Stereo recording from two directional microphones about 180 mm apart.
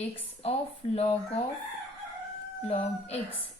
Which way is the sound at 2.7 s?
35° left (ahead or behind).